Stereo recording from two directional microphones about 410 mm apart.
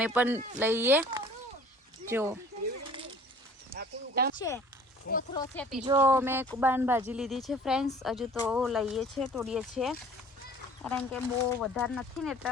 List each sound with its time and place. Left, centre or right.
0.0 s speech: centre
3.8 s a sound: right
4.4 s speech: centre
5.0 s speech: centre
5.4 s speech: centre
5.8 s speech: centre